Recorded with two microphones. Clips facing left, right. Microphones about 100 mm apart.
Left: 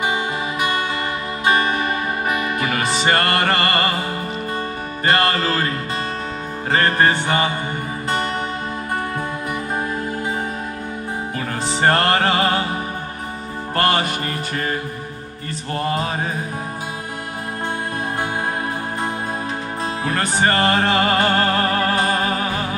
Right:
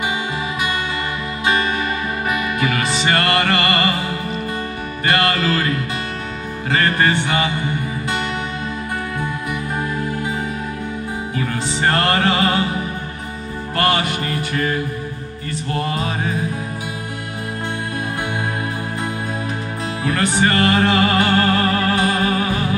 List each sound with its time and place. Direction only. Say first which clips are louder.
1.4 s music: left 1 dB; 45° left (ahead or behind)
5.0 s music: even; 35° left (ahead or behind)
11.3 s music: right 2 dB; 45° left (ahead or behind)
13.7 s music: even; 45° left (ahead or behind)
20.0 s music: right 2 dB; 40° left (ahead or behind)